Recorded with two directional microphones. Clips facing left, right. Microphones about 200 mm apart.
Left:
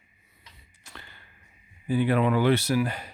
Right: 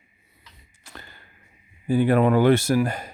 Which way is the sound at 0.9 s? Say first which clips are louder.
Right 4 dB; 40° right (ahead or behind).